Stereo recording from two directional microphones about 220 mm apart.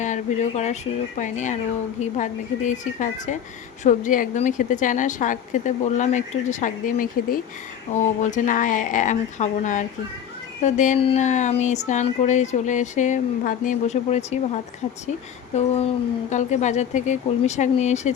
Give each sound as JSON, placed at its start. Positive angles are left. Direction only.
{"t": 0.0, "sound": "speech", "side_deg": 35}
{"t": 15.5, "sound": "a sound", "side_deg": 30}
{"t": 16.3, "sound": "speech", "side_deg": 35}